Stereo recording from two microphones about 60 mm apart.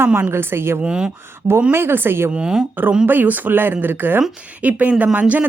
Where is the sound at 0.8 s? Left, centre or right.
Centre.